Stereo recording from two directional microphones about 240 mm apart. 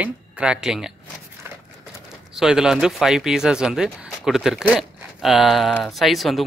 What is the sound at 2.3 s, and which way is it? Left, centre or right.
Speech, centre.